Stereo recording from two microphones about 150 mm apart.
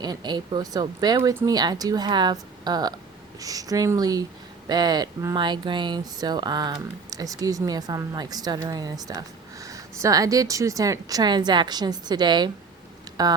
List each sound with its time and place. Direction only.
0.0 s speech: 30° right (ahead or behind)